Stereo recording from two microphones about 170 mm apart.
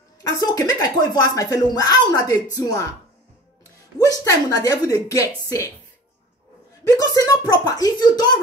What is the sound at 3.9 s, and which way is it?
Speech, 20° left (ahead or behind).